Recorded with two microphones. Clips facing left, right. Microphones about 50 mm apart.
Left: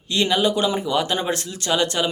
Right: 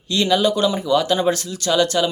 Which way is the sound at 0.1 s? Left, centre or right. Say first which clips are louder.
Right 2 dB; left.